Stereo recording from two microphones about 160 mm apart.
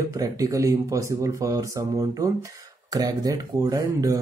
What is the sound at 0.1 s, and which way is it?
Speech, 20° right (ahead or behind).